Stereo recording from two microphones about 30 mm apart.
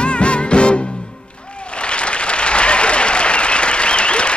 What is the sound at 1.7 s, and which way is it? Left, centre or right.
Applause, left.